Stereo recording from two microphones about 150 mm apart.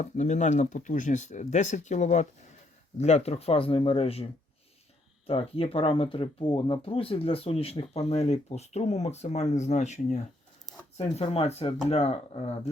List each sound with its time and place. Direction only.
0.0 s speech: 50° left (ahead or behind)
10.9 s speech: 40° left (ahead or behind)